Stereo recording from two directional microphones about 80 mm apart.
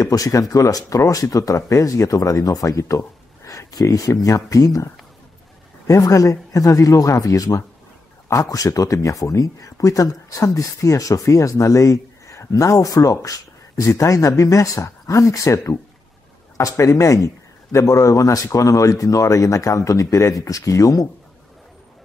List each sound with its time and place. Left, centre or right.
0.0 s speech: left
5.9 s speech: left